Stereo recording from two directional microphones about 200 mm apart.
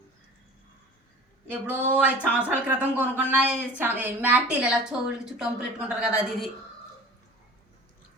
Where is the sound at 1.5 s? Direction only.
10° right (ahead or behind).